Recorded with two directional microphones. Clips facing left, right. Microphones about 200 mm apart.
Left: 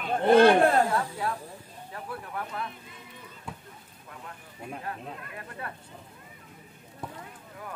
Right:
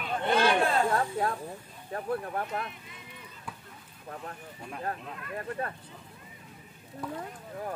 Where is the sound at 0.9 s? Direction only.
35° right (ahead or behind).